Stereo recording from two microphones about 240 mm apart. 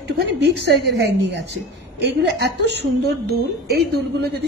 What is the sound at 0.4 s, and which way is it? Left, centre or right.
A woman's voice, right.